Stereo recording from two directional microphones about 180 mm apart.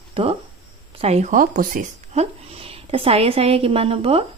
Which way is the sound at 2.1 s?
35° right (ahead or behind).